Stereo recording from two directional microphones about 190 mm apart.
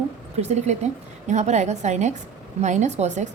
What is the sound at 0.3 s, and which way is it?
A woman's voice, 35° right (ahead or behind).